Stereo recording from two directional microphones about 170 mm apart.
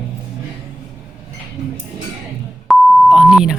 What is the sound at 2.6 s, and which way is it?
Beep, centre (ahead or behind).